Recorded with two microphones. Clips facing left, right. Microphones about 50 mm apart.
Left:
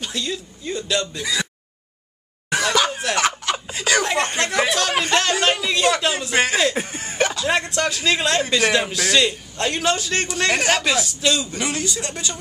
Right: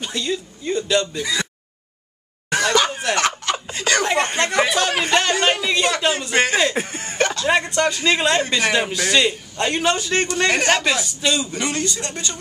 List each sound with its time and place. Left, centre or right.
0.0 s a man's voice: centre
2.5 s a sound: centre
7.4 s a man's voice: centre